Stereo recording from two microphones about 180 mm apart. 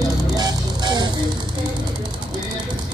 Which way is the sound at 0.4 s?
20° right (ahead or behind).